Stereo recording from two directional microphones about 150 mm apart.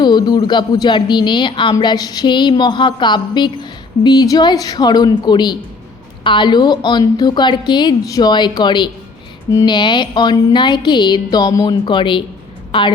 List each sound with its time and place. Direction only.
0.0 s speech: 30° left (ahead or behind)
1.7 s a sound: 30° left (ahead or behind)
9.5 s speech: 25° left (ahead or behind)